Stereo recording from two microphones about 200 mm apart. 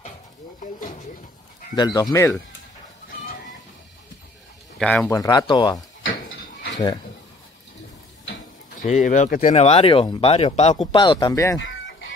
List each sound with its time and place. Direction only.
1.8 s speech: 20° left (ahead or behind)
4.7 s speech: 5° left (ahead or behind); by 5.8 s 20° left (ahead or behind)
8.8 s speech: 35° left (ahead or behind); by 11.6 s 15° left (ahead or behind)